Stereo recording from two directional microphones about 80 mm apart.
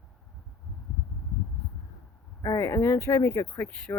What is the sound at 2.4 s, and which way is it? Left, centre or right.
Speech, left.